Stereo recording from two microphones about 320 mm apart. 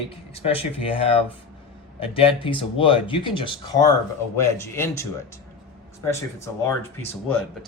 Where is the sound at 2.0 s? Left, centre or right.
Centre.